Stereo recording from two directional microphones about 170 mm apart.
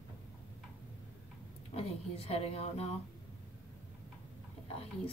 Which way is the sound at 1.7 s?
35° left (ahead or behind).